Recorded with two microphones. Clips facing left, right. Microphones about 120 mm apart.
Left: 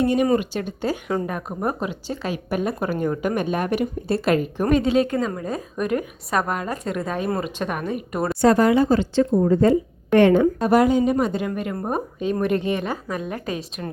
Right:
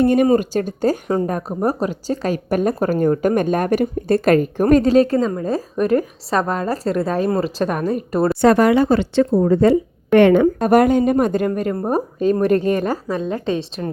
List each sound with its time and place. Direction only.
0.0 s a woman's voice: 50° right (ahead or behind)
0.3 s speech: 40° right (ahead or behind)
8.4 s a woman's voice: 70° right (ahead or behind)
10.4 s a woman's voice: 55° right (ahead or behind)
11.7 s speech: 30° right (ahead or behind)